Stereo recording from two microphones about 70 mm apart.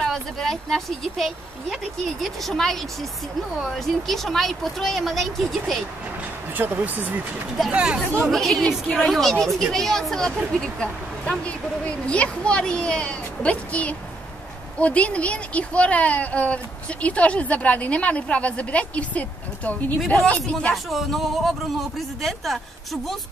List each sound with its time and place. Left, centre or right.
0.0 s speech: centre
6.5 s speech: right
7.7 s speech: centre
8.3 s speech: centre
20.7 s speech: centre